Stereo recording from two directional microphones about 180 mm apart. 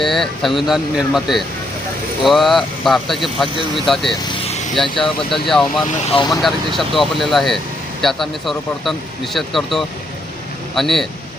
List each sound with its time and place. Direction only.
0.0 s speech: centre (ahead or behind)
4.2 s vehicle: 25° left (ahead or behind)
4.7 s speech: centre (ahead or behind)
6.1 s speech: 25° left (ahead or behind)
6.4 s speech: centre (ahead or behind)